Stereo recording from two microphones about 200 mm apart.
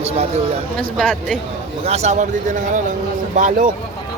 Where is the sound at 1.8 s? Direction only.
30° right (ahead or behind).